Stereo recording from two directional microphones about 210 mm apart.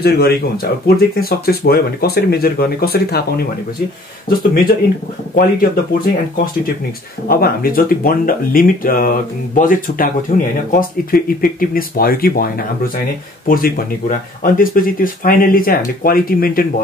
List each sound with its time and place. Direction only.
0.8 s speech: 45° left (ahead or behind)
4.3 s speech: 45° left (ahead or behind)